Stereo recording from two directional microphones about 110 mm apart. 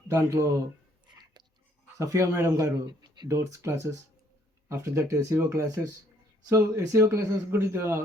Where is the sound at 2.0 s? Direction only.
30° right (ahead or behind).